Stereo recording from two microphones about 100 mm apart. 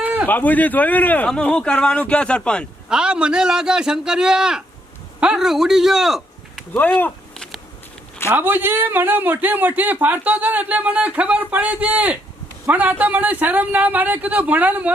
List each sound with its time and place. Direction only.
0.0 s a sound: 15° right (ahead or behind)
0.3 s speech: 15° left (ahead or behind)
2.9 s a man's voice: 10° right (ahead or behind)
7.3 s insect: 5° left (ahead or behind)
8.3 s a man's voice: 20° right (ahead or behind)